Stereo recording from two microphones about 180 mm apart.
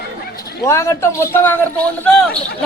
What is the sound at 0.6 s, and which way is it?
Speech, 15° left (ahead or behind).